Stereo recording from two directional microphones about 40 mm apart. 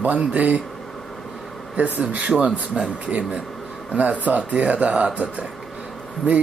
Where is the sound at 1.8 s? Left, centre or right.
Right.